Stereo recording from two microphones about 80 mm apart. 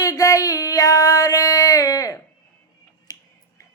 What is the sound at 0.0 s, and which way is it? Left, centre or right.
Child singing, left.